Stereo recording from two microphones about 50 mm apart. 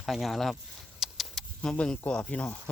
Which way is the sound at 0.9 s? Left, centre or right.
Centre.